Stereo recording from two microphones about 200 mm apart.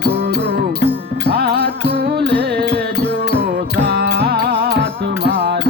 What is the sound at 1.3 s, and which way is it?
Music, 55° right (ahead or behind).